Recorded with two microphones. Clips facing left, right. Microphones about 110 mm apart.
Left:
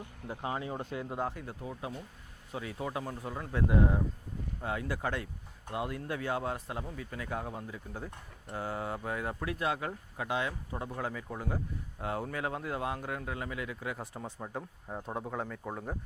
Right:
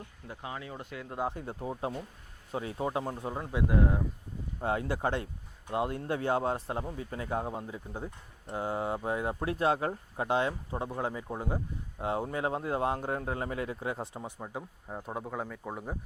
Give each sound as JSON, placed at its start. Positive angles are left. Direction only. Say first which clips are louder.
{"t": 0.3, "sound": "speech", "louder": "left 5 dB", "side_deg": 25}
{"t": 1.3, "sound": "speech", "louder": "right 4 dB", "side_deg": -25}
{"t": 4.6, "sound": "speech", "louder": "right 5 dB", "side_deg": -35}
{"t": 14.2, "sound": "speech", "louder": "even", "side_deg": -10}